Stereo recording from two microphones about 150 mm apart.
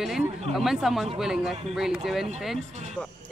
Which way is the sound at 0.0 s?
Centre (ahead or behind).